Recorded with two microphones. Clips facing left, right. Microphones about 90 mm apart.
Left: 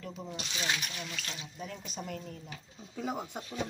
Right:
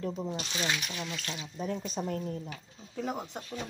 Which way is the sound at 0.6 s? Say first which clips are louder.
Even; 40° right (ahead or behind).